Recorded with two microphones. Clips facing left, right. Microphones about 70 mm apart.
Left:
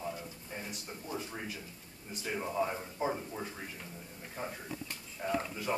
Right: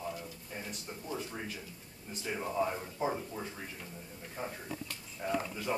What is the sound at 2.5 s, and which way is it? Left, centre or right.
Speech, centre.